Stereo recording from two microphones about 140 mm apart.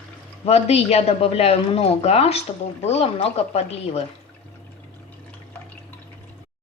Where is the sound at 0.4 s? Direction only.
45° left (ahead or behind).